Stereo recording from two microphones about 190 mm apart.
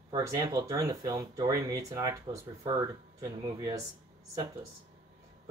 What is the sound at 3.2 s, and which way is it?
Speech, 20° right (ahead or behind).